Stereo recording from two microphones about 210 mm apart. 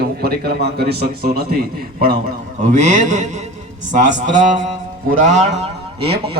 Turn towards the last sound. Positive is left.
turn(degrees=-30)  # may be behind; listen again after turning